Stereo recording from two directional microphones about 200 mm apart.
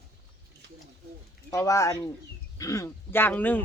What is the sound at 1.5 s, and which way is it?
Speech, 15° left (ahead or behind).